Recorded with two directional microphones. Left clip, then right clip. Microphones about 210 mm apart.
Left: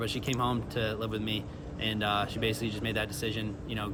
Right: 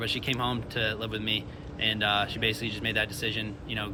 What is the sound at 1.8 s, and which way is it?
Speech, 10° left (ahead or behind).